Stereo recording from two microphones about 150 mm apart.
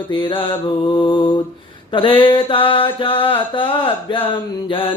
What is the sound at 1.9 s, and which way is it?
Mantra, 35° left (ahead or behind).